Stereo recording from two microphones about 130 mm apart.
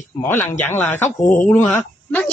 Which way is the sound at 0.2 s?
20° left (ahead or behind).